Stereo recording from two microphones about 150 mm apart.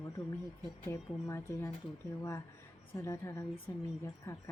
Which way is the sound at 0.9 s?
20° left (ahead or behind).